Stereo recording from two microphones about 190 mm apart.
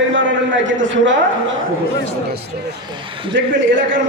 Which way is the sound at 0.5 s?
75° right (ahead or behind).